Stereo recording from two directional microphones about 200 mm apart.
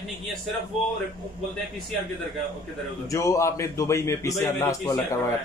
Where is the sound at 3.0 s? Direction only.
15° left (ahead or behind).